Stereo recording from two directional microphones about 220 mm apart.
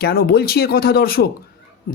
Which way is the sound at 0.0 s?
45° left (ahead or behind).